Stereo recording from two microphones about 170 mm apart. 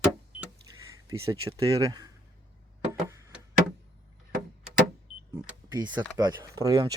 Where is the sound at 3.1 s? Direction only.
20° right (ahead or behind).